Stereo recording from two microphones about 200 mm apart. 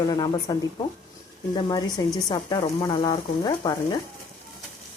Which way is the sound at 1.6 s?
20° left (ahead or behind).